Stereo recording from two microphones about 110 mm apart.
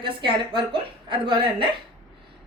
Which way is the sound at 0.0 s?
50° right (ahead or behind).